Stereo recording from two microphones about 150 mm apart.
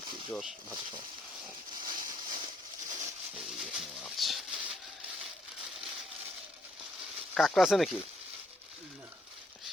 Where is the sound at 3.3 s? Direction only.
Centre (ahead or behind).